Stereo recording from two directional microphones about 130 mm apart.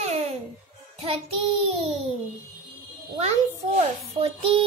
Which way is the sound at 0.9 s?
50° right (ahead or behind).